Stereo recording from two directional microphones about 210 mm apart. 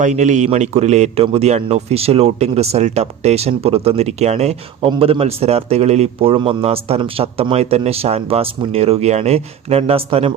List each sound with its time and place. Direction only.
0.0 s a man's voice: 35° right (ahead or behind)